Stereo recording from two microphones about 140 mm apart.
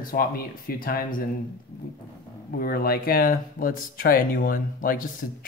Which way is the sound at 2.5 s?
90° left.